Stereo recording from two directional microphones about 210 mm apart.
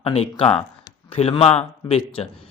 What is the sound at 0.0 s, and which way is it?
A man's voice, 25° left (ahead or behind).